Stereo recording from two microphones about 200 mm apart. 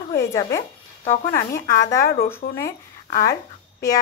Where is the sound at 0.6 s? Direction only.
40° left (ahead or behind).